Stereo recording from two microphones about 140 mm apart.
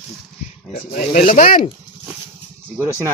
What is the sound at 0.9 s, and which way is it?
Speech, 90° left.